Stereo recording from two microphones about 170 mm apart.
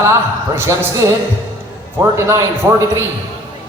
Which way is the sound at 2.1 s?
15° right (ahead or behind).